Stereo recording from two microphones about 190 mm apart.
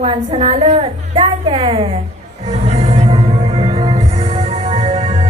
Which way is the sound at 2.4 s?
35° right (ahead or behind).